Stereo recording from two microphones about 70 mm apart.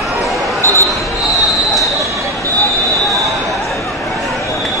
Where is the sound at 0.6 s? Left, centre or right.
Right.